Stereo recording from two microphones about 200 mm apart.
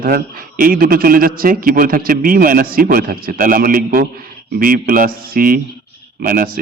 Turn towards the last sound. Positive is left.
turn(degrees=-45)  # may be behind; listen again after turning